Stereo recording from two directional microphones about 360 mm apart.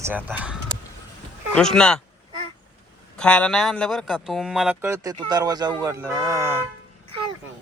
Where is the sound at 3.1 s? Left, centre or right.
Centre.